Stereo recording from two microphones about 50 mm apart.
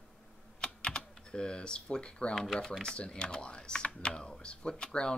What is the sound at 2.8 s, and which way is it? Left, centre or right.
Speech, left.